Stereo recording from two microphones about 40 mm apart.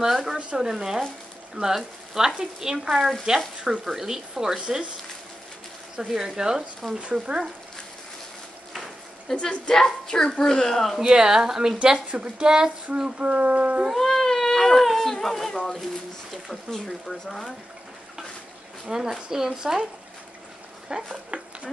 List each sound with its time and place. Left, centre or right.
0.0 s speech: centre
6.1 s speech: centre
7.0 s a woman's voice: right
9.3 s speech: centre
11.0 s a woman's voice: centre
13.2 s speech: right
13.9 s cat: centre
16.7 s speech: centre
18.9 s speech: centre
20.9 s a woman's voice: right
21.3 s speech: right